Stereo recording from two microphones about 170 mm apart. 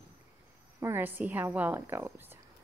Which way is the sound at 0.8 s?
10° right (ahead or behind).